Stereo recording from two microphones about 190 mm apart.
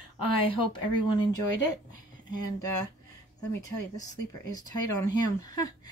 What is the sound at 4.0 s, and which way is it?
Speech, 20° left (ahead or behind).